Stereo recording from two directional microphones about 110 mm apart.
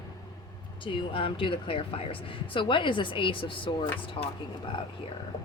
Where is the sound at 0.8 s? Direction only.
50° left (ahead or behind).